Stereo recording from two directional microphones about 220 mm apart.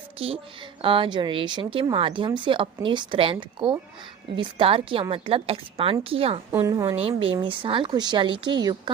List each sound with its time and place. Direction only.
0.2 s speech: 25° right (ahead or behind)
6.5 s a woman's voice: 15° right (ahead or behind)
7.1 s speech: 25° right (ahead or behind)